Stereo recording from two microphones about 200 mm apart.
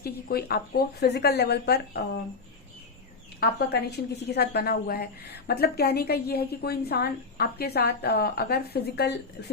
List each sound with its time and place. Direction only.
0.0 s a woman's voice: 50° left (ahead or behind)
3.4 s a woman's voice: 55° left (ahead or behind)